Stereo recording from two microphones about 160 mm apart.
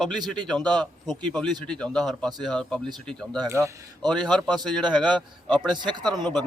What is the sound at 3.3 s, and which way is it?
A man's voice, 20° right (ahead or behind).